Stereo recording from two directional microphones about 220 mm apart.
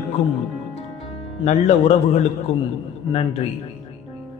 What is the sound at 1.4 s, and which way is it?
Speech, 30° left (ahead or behind).